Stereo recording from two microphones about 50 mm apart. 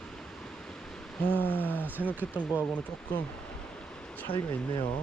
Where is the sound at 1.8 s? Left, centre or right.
Right.